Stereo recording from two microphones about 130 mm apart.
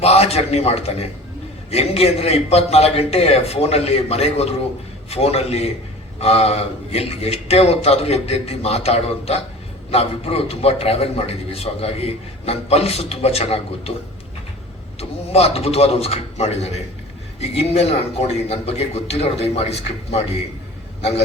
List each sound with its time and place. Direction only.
0.0 s a man's voice: 55° left (ahead or behind)
14.9 s a man's voice: 50° left (ahead or behind)